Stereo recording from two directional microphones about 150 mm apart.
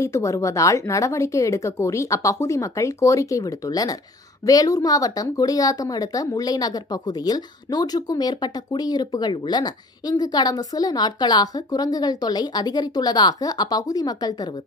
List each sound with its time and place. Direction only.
0.0 s a woman's voice: 20° left (ahead or behind)